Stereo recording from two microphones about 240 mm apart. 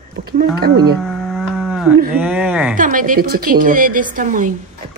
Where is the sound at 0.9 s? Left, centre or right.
Centre.